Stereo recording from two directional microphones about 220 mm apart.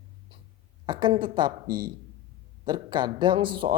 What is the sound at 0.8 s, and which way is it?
A man's voice, 20° right (ahead or behind).